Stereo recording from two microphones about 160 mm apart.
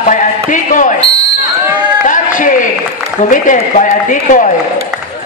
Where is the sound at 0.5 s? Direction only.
55° left (ahead or behind).